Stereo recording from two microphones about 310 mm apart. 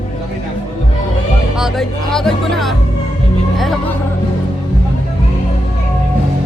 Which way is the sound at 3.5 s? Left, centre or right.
Centre.